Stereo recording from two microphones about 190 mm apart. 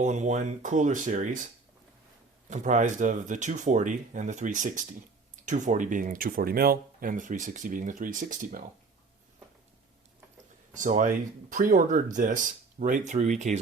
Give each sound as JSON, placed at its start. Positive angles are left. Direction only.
{"t": 0.0, "sound": "speech", "side_deg": -40}
{"t": 2.5, "sound": "speech", "side_deg": -40}
{"t": 10.8, "sound": "speech", "side_deg": -40}